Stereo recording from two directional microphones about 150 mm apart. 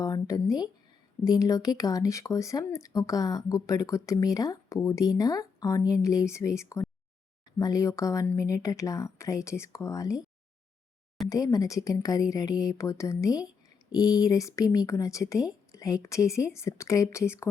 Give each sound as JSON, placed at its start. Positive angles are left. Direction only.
{"t": 0.0, "sound": "speech", "side_deg": 20}
{"t": 11.3, "sound": "speech", "side_deg": 25}